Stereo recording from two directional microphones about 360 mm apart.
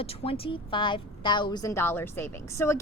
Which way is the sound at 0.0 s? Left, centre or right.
Centre.